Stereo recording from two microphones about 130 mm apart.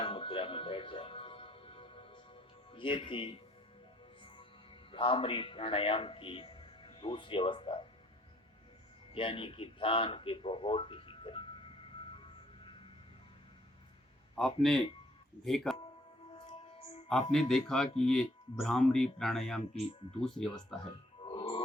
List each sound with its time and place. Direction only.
0.0 s music: 45° left (ahead or behind)
2.7 s speech: 40° left (ahead or behind)
4.9 s a man's voice: 40° left (ahead or behind)
9.1 s speech: 45° left (ahead or behind)
12.1 s music: 40° left (ahead or behind)
14.3 s speech: 5° left (ahead or behind)
17.3 s speech: 5° left (ahead or behind)
19.8 s speech: 50° left (ahead or behind)
21.2 s music: 40° left (ahead or behind)